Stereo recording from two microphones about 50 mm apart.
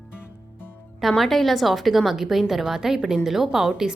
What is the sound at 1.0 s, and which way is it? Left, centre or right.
A woman's voice, centre.